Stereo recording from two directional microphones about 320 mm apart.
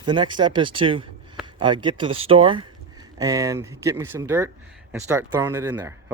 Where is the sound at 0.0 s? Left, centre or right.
Centre.